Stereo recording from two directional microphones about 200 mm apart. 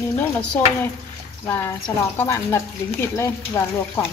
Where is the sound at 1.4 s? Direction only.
10° left (ahead or behind).